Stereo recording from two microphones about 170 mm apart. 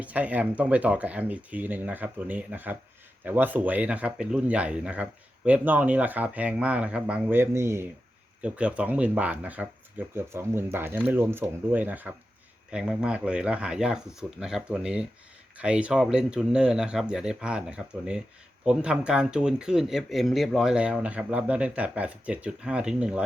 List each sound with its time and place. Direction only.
0.0 s speech: 10° right (ahead or behind)